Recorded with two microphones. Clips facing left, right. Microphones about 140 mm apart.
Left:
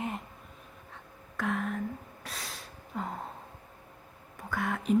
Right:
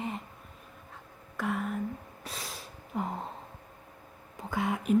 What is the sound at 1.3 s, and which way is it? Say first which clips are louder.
Speech: even; centre (ahead or behind).